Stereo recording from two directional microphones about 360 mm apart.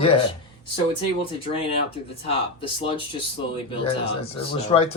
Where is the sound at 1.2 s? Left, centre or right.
Centre.